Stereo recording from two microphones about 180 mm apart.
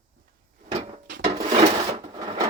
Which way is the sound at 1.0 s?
70° right (ahead or behind).